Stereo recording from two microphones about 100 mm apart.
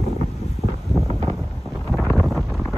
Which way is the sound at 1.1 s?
70° right (ahead or behind).